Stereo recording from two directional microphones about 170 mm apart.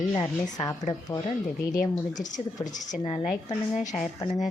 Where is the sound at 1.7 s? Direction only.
50° left (ahead or behind).